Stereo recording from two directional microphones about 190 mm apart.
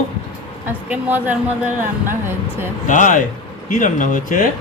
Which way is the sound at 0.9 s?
10° right (ahead or behind).